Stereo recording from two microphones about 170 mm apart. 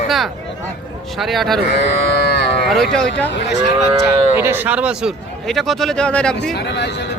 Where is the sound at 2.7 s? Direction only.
Centre (ahead or behind).